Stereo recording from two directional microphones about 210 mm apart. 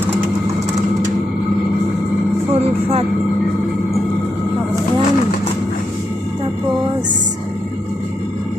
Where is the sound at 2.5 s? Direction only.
30° right (ahead or behind).